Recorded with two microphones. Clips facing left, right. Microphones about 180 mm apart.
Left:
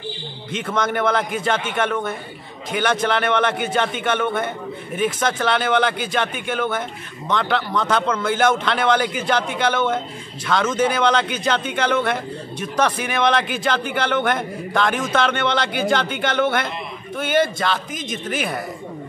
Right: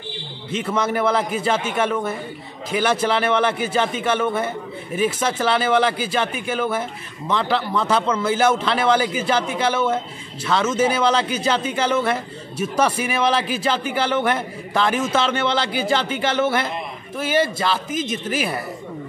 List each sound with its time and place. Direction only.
0.7 s a man's voice: 5° right (ahead or behind)